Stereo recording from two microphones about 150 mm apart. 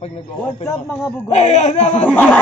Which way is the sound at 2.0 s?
10° left (ahead or behind).